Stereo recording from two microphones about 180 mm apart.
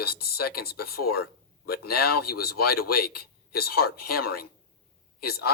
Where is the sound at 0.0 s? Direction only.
60° left (ahead or behind).